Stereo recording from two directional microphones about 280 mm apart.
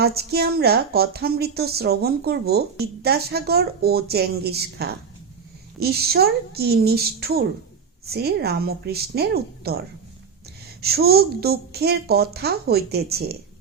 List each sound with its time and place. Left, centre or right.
0.0 s a woman's voice: right